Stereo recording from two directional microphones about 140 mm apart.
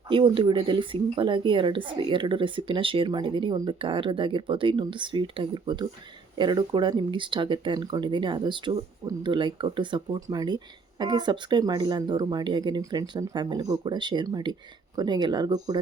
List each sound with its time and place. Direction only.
0.1 s a woman's voice: 35° right (ahead or behind)